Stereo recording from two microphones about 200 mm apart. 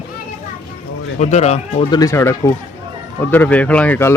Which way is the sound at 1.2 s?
35° left (ahead or behind).